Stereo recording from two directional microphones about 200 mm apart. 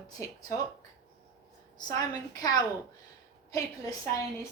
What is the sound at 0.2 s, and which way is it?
Speech, 15° left (ahead or behind).